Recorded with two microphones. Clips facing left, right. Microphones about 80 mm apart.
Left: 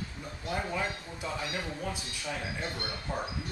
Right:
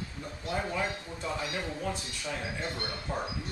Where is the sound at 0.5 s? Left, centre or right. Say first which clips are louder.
Right 1 dB; centre.